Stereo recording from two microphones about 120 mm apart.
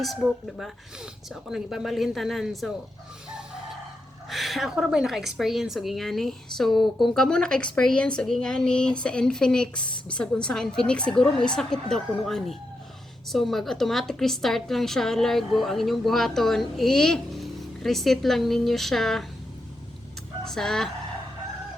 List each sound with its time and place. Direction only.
0.0 s a woman's voice: centre (ahead or behind)
4.3 s a woman's voice: centre (ahead or behind)
20.4 s speech: 5° left (ahead or behind)